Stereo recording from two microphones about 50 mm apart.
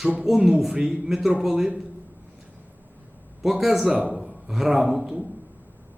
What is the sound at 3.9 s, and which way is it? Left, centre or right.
Speech, right.